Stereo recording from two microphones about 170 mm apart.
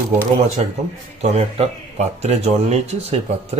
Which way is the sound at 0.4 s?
45° right (ahead or behind).